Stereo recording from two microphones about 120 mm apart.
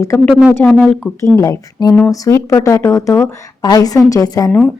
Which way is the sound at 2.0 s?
30° left (ahead or behind).